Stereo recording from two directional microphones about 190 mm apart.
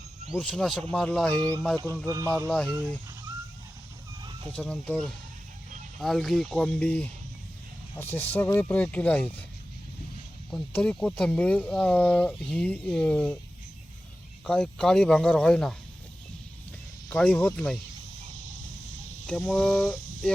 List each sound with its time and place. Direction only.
0.3 s speech: centre (ahead or behind)
2.0 s speech: 20° right (ahead or behind)
2.5 s speech: 5° left (ahead or behind)
4.5 s speech: 5° left (ahead or behind)
10.5 s speech: 5° left (ahead or behind)
14.4 s speech: 5° left (ahead or behind)
17.1 s speech: 5° left (ahead or behind)
19.5 s a sound: 5° left (ahead or behind)